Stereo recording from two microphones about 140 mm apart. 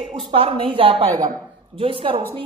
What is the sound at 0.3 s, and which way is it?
Speech, 40° right (ahead or behind).